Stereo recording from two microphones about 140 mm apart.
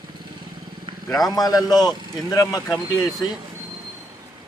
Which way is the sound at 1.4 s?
25° left (ahead or behind).